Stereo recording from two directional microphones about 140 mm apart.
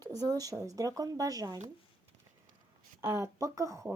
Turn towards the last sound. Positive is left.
turn(degrees=-20)  # may be behind; listen again after turning